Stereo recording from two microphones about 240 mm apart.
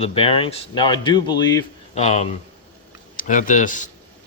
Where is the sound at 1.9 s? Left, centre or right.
Left.